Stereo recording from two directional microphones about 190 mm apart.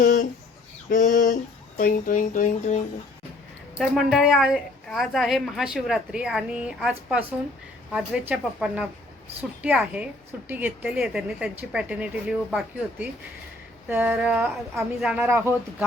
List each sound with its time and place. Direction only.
0.0 s a sound: 50° left (ahead or behind)
0.9 s speech: 45° left (ahead or behind)
3.8 s a woman's voice: centre (ahead or behind)